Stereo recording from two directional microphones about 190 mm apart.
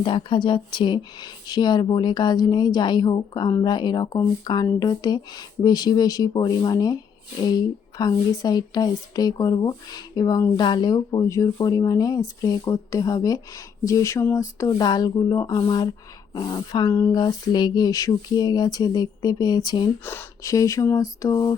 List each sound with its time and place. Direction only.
0.0 s speech: 25° left (ahead or behind)